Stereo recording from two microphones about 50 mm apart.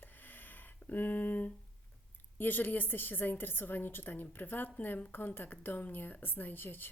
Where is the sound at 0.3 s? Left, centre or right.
Left.